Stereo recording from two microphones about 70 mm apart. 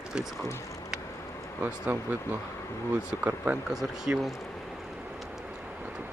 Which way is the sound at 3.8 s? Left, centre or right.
Centre.